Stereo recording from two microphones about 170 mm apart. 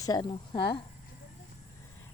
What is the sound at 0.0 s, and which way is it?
Speech, 25° left (ahead or behind).